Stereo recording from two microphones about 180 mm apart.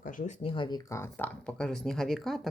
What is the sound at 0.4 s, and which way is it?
Speech, 25° left (ahead or behind).